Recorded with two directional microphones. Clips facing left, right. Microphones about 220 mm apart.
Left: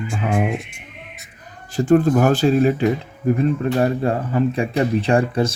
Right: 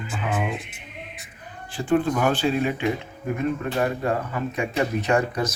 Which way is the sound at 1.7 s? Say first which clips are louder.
Left 7 dB; 40° left (ahead or behind).